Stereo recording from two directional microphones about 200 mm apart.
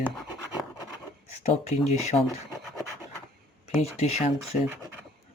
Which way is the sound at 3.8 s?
30° left (ahead or behind).